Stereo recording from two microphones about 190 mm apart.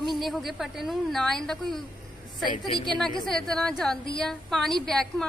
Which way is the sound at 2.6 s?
25° left (ahead or behind).